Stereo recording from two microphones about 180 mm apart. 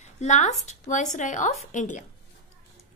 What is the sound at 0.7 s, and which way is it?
A woman's voice, 40° left (ahead or behind).